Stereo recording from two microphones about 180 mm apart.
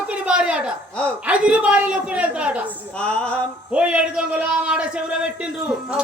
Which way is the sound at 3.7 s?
5° right (ahead or behind).